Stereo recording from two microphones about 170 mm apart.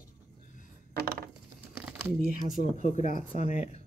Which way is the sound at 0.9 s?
65° right (ahead or behind).